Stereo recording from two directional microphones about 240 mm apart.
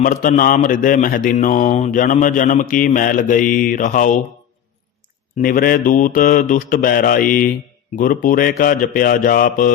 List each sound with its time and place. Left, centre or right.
0.0 s speech: left
5.4 s speech: left